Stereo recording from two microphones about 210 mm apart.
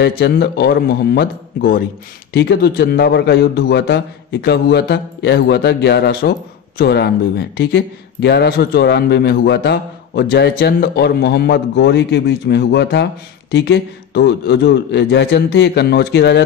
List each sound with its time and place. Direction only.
0.0 s a man's voice: 50° left (ahead or behind)